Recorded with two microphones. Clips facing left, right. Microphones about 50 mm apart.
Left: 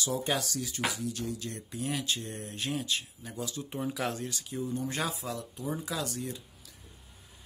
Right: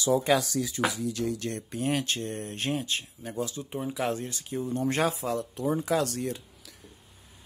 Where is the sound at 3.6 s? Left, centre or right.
Centre.